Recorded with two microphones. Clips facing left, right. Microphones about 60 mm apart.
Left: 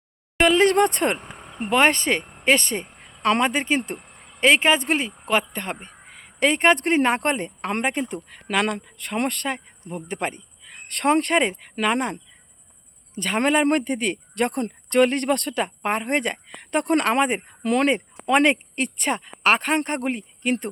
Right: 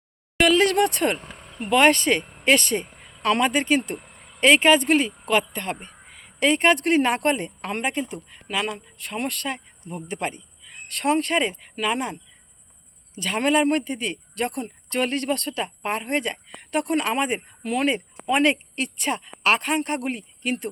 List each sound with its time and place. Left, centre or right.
0.4 s speech: left
1.2 s speech: left
4.0 s a sound: left
4.4 s speech: left
13.1 s speech: left
17.6 s speech: left